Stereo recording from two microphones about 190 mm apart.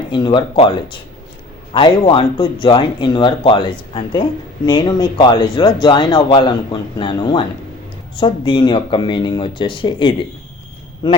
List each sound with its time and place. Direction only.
0.1 s speech: 25° left (ahead or behind)